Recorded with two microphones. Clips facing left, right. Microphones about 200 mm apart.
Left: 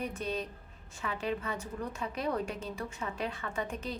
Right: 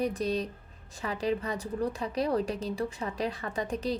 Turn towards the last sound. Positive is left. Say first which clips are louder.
# right 5 dB
turn(degrees=-35)  # may be behind; listen again after turning